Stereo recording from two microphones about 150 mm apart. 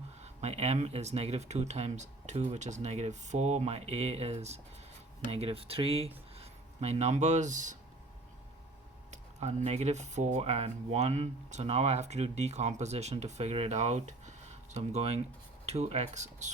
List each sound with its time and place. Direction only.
0.2 s speech: 45° right (ahead or behind)
9.0 s speech: 50° right (ahead or behind)